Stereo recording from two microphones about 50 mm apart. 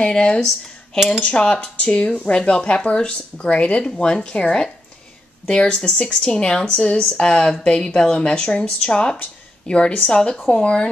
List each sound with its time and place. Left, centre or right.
0.0 s speech: centre
0.9 s cutlery: centre
1.2 s speech: centre